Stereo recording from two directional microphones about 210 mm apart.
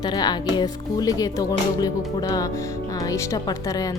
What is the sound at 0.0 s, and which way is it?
Speech, 20° left (ahead or behind).